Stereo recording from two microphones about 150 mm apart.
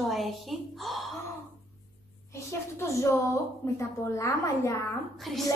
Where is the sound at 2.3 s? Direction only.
20° left (ahead or behind).